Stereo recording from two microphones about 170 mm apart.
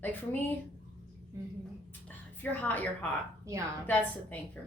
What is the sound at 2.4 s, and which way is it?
Speech, 10° left (ahead or behind).